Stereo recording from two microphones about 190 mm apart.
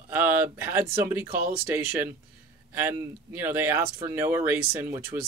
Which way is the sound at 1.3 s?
50° right (ahead or behind).